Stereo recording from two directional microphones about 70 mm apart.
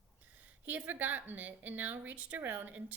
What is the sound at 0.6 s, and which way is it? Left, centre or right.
A woman's voice, right.